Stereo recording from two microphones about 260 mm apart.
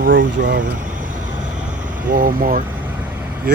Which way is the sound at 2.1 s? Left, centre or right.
Right.